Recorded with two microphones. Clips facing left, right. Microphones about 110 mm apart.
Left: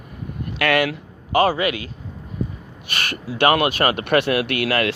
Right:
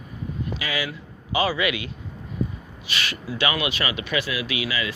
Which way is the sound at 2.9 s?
50° left (ahead or behind).